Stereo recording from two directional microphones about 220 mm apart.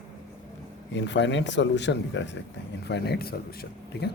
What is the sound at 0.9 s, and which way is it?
A man's voice, 55° left (ahead or behind).